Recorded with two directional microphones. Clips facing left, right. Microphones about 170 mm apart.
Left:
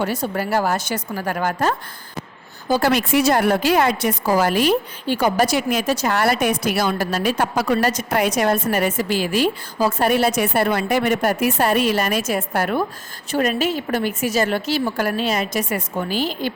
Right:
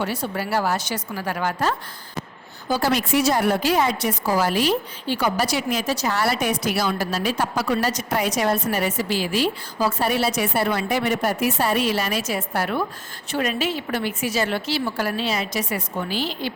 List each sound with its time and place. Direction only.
0.0 s a woman's voice: 45° left (ahead or behind)